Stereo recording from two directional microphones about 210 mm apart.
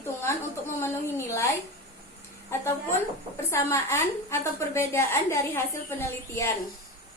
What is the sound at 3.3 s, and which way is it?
A woman's voice, 15° left (ahead or behind).